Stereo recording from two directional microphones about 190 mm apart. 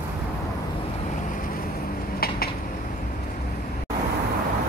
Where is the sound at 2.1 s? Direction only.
55° left (ahead or behind).